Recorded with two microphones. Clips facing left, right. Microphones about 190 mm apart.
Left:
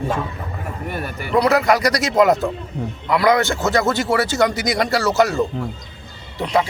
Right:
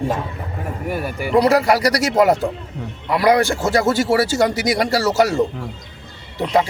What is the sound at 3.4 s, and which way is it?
Speech, 10° right (ahead or behind).